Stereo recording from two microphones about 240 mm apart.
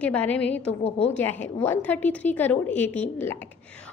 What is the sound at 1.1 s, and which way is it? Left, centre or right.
A woman's voice, centre.